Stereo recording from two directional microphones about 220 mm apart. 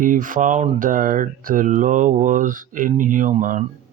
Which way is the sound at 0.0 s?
35° right (ahead or behind).